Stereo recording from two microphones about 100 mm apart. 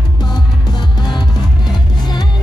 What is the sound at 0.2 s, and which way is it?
Music, 45° left (ahead or behind).